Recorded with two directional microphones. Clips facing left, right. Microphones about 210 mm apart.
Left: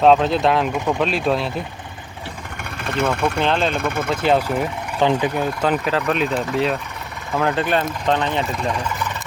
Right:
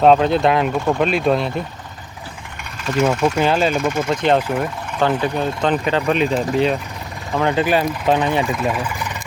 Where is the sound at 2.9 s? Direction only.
55° left (ahead or behind).